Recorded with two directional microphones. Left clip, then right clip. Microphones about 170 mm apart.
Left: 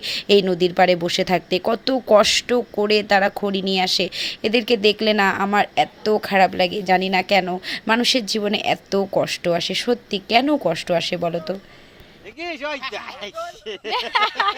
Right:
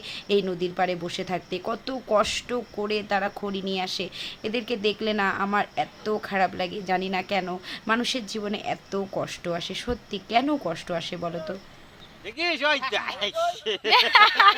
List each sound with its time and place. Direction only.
0.0 s speech: 35° left (ahead or behind)
12.4 s speech: 25° right (ahead or behind)